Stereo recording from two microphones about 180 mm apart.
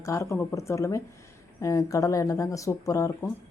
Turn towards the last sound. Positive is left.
turn(degrees=15)  # may be behind; listen again after turning